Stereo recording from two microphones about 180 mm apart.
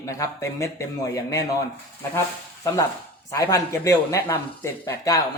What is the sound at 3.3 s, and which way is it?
Speech, 15° left (ahead or behind).